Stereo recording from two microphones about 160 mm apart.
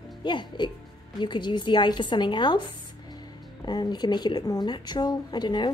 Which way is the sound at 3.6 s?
25° left (ahead or behind).